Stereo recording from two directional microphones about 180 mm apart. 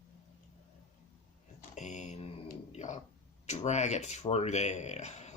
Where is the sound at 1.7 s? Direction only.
40° left (ahead or behind).